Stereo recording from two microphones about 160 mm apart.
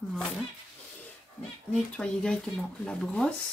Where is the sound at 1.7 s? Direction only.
5° left (ahead or behind).